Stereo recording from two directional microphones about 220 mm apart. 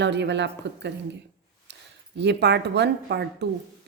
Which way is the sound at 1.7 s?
50° right (ahead or behind).